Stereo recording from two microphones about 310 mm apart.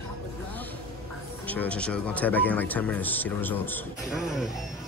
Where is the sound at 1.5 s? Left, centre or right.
Centre.